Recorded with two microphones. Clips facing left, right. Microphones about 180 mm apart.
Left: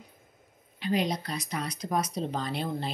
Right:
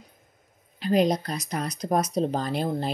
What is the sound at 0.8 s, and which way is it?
Speech, 40° right (ahead or behind).